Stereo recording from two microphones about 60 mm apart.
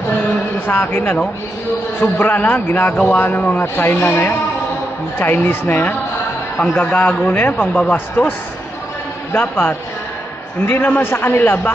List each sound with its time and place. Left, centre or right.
0.7 s a man's voice: left
3.6 s a man's voice: left
7.6 s a man's voice: centre
9.3 s a man's voice: left